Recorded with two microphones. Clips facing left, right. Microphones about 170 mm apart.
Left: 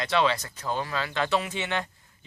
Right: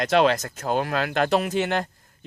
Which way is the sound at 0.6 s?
65° right (ahead or behind).